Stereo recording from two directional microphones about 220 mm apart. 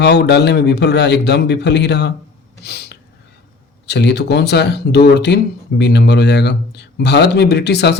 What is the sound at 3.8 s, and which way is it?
Speech, 50° left (ahead or behind).